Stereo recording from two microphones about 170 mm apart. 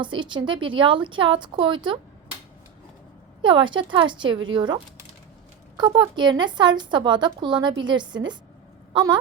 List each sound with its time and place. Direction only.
0.0 s a woman's voice: 30° right (ahead or behind)
3.4 s a woman's voice: 30° right (ahead or behind)